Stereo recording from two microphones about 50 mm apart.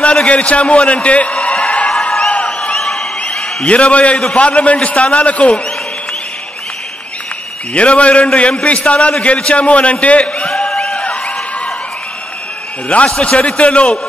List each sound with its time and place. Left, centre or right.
0.0 s a man's voice: left
1.3 s a sound: centre
3.6 s a man's voice: left
7.7 s a man's voice: left
10.3 s a sound: centre
12.8 s a man's voice: left